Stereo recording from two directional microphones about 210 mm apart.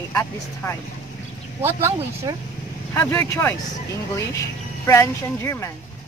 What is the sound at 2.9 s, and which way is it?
Speech, 10° left (ahead or behind).